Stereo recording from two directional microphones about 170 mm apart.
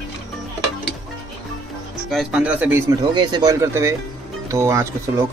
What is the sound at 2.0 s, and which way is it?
Speech, centre (ahead or behind).